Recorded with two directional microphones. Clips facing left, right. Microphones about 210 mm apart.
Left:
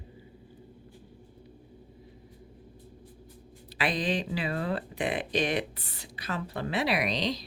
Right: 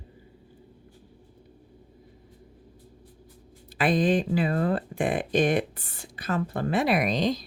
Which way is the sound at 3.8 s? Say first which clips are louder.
Right 7 dB; 50° right (ahead or behind).